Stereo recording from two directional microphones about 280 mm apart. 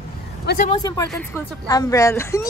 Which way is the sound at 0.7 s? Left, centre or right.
Centre.